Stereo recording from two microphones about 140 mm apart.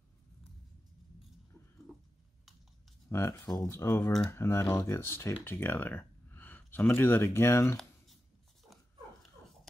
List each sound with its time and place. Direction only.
3.1 s speech: 20° left (ahead or behind)